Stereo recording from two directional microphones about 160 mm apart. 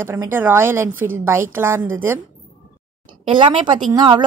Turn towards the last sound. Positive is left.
turn(degrees=-25)  # may be behind; listen again after turning